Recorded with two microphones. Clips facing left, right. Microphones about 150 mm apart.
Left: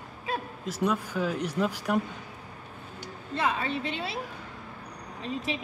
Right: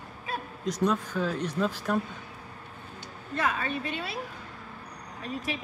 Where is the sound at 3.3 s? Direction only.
25° left (ahead or behind).